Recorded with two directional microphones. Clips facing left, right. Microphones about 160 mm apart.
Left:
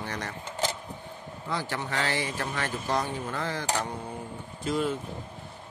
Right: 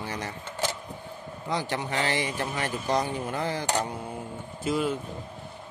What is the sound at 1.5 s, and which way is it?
Speech, 15° right (ahead or behind).